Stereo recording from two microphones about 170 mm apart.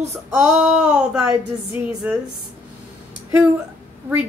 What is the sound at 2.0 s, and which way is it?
Speech, 10° right (ahead or behind).